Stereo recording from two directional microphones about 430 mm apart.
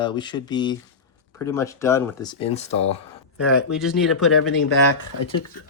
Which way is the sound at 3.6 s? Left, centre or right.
Centre.